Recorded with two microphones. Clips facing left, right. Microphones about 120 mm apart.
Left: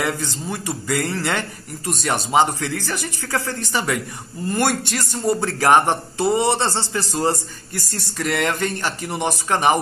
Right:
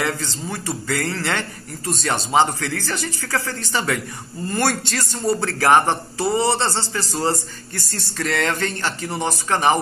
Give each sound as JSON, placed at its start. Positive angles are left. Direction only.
{"t": 0.0, "sound": "a man's voice", "side_deg": 15}